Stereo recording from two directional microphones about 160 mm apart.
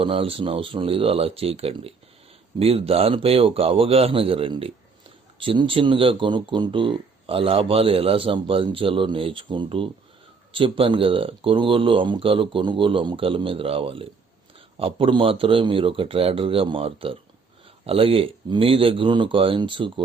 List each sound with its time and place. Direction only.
0.0 s speech: 35° right (ahead or behind)